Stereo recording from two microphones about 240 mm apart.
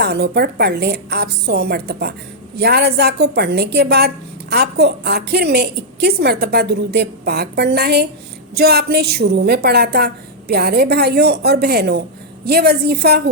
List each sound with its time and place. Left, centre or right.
0.0 s a woman's voice: right